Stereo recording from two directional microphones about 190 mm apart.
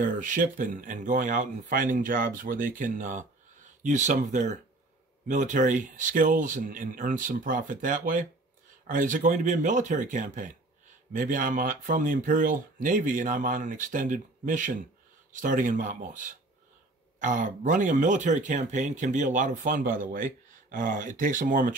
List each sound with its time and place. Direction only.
0.0 s speech: 45° right (ahead or behind)